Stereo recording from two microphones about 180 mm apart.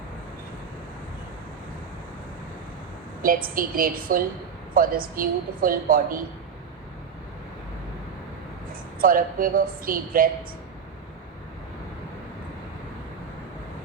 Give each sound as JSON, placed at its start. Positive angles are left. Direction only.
{"t": 3.2, "sound": "a woman's voice", "side_deg": -50}
{"t": 9.0, "sound": "a woman's voice", "side_deg": -50}